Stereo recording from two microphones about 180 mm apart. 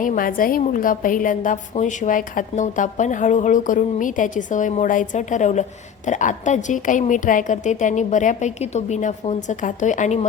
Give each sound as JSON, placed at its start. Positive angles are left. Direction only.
{"t": 0.0, "sound": "a woman's voice", "side_deg": 50}